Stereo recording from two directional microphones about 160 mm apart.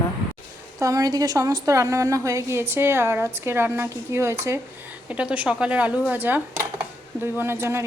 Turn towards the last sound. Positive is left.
turn(degrees=-15)  # may be behind; listen again after turning